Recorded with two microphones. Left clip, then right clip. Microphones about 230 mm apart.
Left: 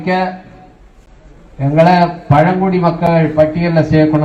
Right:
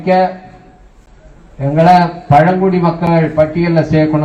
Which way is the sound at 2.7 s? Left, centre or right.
Left.